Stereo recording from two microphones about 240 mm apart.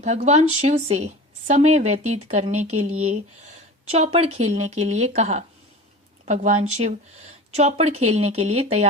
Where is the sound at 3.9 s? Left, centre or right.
Right.